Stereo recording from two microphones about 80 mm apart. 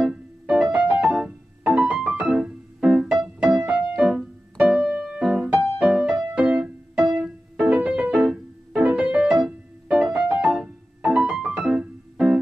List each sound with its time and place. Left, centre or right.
0.0 s music: centre